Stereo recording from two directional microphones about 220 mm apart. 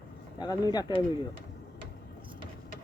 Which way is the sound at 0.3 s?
20° left (ahead or behind).